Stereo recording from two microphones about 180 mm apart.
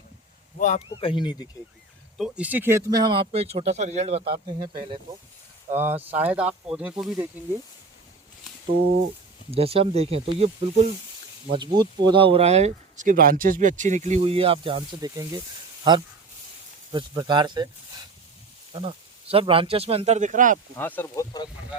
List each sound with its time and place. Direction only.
0.9 s speech: 30° left (ahead or behind)
2.1 s speech: 5° right (ahead or behind); by 4.3 s 35° right (ahead or behind)
4.4 s speech: 25° right (ahead or behind)
5.7 s speech: 10° right (ahead or behind)
8.6 s a sound: 55° right (ahead or behind)
9.5 s speech: 35° right (ahead or behind)
11.5 s speech: 25° right (ahead or behind)
16.9 s speech: 25° right (ahead or behind); by 20.6 s 45° right (ahead or behind)
20.7 s speech: 10° left (ahead or behind)